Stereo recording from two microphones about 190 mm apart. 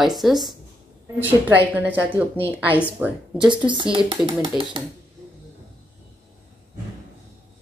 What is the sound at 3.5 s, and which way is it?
Speech, 25° right (ahead or behind).